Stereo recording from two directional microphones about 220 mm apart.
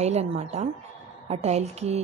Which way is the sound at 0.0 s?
30° right (ahead or behind).